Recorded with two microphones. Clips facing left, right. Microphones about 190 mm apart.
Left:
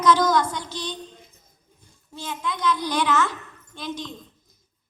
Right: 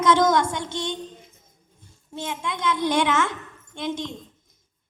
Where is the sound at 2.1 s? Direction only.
25° right (ahead or behind).